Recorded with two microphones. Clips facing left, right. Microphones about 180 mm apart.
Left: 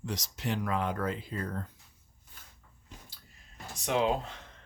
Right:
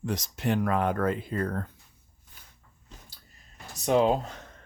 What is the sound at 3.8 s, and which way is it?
Speech, 40° right (ahead or behind).